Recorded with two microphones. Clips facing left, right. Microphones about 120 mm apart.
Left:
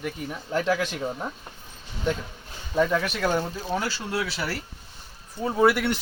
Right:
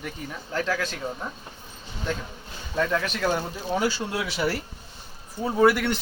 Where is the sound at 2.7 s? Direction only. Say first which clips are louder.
Left 2 dB; 10° left (ahead or behind).